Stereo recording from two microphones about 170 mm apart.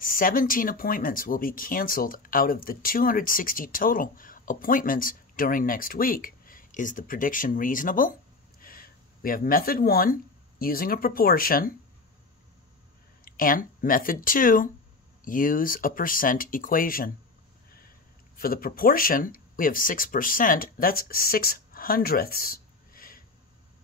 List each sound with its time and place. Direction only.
0.0 s speech: 55° left (ahead or behind)
13.2 s speech: 55° left (ahead or behind)
18.4 s speech: 60° left (ahead or behind)